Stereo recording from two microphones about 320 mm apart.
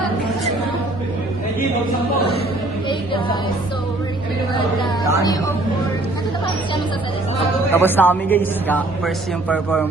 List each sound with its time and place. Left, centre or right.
7.3 s a woman's voice: centre